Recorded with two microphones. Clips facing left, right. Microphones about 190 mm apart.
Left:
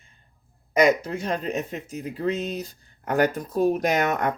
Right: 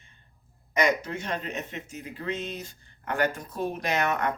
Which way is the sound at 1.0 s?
35° left (ahead or behind).